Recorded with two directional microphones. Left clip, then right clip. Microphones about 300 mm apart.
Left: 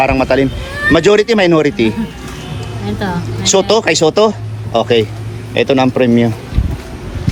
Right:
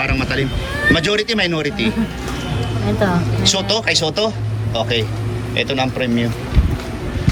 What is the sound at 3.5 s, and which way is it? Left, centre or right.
Speech, centre.